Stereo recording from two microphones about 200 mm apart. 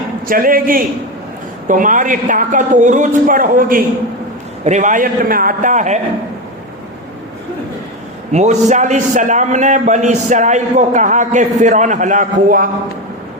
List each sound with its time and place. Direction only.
0.3 s a man's voice: 45° right (ahead or behind)
8.3 s a man's voice: 35° right (ahead or behind)